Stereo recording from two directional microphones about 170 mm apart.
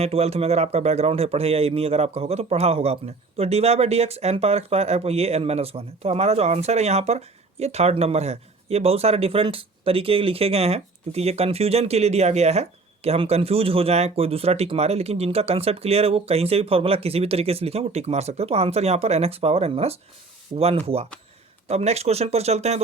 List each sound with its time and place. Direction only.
0.0 s a man's voice: 35° right (ahead or behind)